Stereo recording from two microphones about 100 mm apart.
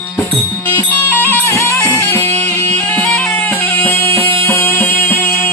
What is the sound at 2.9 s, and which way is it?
Music, 10° left (ahead or behind).